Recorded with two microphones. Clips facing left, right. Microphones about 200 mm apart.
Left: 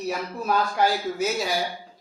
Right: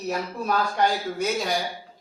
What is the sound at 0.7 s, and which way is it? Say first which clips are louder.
Speech: left 1 dB; 5° left (ahead or behind).